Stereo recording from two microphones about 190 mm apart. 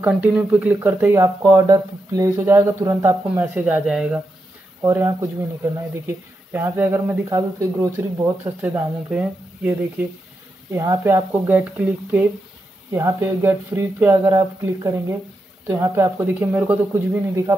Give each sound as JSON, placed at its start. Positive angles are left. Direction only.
{"t": 0.0, "sound": "speech", "side_deg": -5}
{"t": 4.8, "sound": "speech", "side_deg": -15}